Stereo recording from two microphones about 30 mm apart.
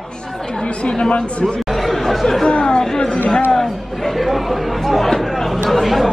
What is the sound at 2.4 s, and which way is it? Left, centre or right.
Speech, left.